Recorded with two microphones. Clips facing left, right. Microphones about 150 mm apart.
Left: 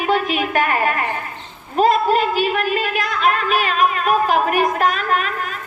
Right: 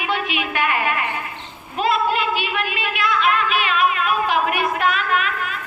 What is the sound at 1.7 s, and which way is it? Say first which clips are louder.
A woman's voice: left 5 dB; 40° left (ahead or behind).